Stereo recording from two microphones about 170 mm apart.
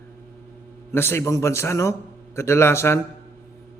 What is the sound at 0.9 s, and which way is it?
A man's voice, 15° left (ahead or behind).